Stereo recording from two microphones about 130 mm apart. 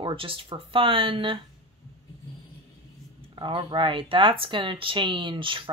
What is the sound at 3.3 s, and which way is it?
Speech, 40° right (ahead or behind).